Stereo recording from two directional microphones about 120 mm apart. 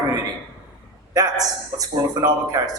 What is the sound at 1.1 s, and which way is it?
A man's voice, 30° right (ahead or behind).